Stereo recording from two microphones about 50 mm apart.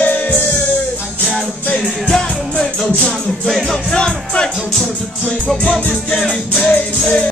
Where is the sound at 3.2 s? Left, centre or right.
Centre.